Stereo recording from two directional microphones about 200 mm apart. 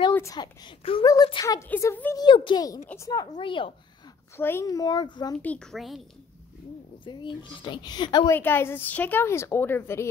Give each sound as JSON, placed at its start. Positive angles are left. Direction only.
{"t": 0.1, "sound": "a woman's voice", "side_deg": 15}
{"t": 2.2, "sound": "speech", "side_deg": 25}
{"t": 4.4, "sound": "speech", "side_deg": 10}
{"t": 5.4, "sound": "speech", "side_deg": 5}
{"t": 7.1, "sound": "speech", "side_deg": 25}
{"t": 8.4, "sound": "a woman's voice", "side_deg": 10}